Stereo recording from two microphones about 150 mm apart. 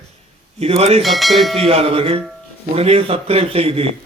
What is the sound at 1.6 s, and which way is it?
Speech, 40° right (ahead or behind).